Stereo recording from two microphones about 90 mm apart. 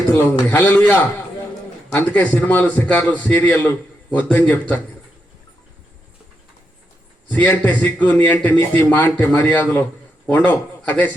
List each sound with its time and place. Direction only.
0.2 s a man's voice: 25° left (ahead or behind)
7.3 s a man's voice: 20° left (ahead or behind)